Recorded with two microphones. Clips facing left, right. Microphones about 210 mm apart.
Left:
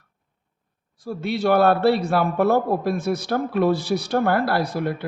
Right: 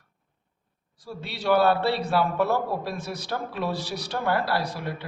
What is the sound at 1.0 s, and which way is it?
A man's voice, 50° left (ahead or behind).